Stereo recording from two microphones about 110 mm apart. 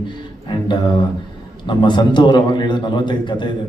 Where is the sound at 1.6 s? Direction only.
45° left (ahead or behind).